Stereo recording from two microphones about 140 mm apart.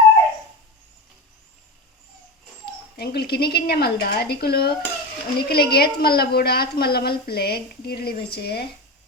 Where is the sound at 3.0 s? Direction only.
90° left.